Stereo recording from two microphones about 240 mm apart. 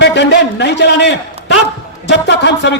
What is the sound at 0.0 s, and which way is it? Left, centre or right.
A man's voice, left.